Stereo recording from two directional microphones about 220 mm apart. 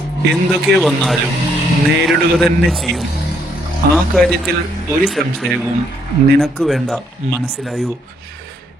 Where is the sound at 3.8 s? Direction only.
45° right (ahead or behind).